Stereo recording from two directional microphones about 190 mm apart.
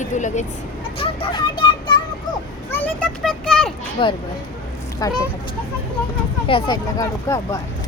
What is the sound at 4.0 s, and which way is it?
Speech, 25° left (ahead or behind).